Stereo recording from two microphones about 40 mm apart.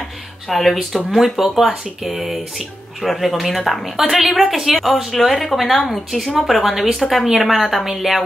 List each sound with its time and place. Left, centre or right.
0.5 s a woman's voice: centre
7.0 s a woman's voice: centre
7.2 s a woman's voice: centre